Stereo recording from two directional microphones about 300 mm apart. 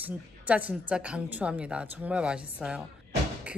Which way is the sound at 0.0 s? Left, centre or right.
Centre.